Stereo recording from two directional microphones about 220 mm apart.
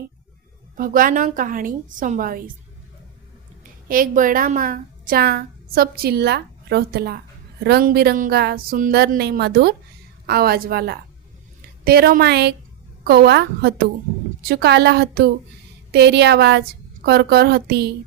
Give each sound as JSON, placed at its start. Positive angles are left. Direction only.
{"t": 0.8, "sound": "a woman's voice", "side_deg": -40}
{"t": 3.6, "sound": "a woman's voice", "side_deg": -40}